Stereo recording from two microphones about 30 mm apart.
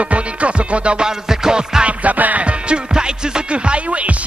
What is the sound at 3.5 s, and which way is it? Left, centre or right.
Music, right.